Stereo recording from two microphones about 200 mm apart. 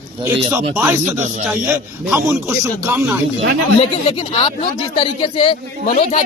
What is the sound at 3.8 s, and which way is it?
Speech, 30° left (ahead or behind).